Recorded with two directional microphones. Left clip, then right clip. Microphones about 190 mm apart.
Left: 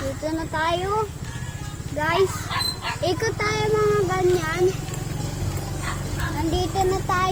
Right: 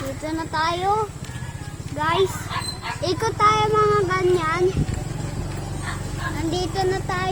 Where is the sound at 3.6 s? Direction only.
10° right (ahead or behind).